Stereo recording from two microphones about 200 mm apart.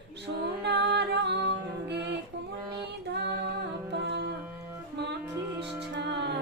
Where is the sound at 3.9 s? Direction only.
60° right (ahead or behind).